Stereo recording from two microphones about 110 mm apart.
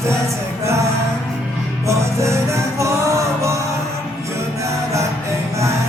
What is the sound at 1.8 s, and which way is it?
Music, 25° right (ahead or behind).